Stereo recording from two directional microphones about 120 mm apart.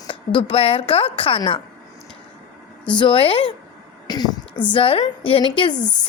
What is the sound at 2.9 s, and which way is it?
Speech, 40° left (ahead or behind).